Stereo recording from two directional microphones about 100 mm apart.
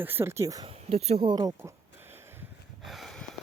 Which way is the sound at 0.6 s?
90° right.